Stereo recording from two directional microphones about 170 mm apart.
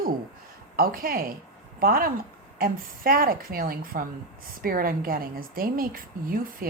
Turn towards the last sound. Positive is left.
turn(degrees=-60)  # may be behind; listen again after turning